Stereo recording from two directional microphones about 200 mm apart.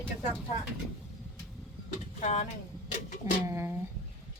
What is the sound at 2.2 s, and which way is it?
Speech, 35° left (ahead or behind).